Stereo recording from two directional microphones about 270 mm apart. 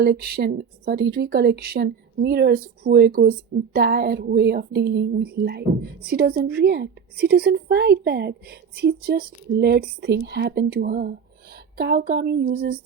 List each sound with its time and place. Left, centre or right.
0.0 s a woman's voice: right